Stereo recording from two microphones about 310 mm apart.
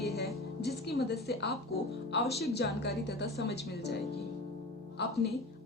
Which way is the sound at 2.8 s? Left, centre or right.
Left.